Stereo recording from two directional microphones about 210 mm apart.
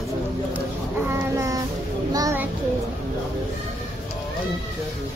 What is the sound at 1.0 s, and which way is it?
Child singing, 15° right (ahead or behind).